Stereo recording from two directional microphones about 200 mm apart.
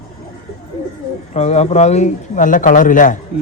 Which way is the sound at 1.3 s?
35° left (ahead or behind).